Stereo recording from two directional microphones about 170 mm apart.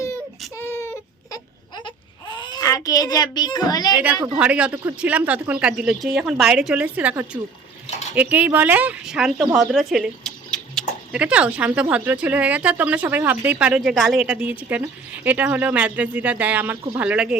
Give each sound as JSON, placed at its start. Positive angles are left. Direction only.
{"t": 0.0, "sound": "baby cry", "side_deg": 15}
{"t": 1.7, "sound": "baby cry", "side_deg": 25}
{"t": 3.9, "sound": "a woman's voice", "side_deg": -10}